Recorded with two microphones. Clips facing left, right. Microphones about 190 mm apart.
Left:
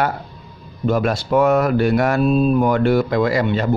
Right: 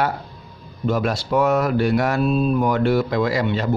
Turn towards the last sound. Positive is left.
turn(degrees=55)  # may be behind; listen again after turning